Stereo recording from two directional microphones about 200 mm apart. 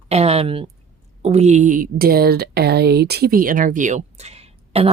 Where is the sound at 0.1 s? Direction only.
30° right (ahead or behind).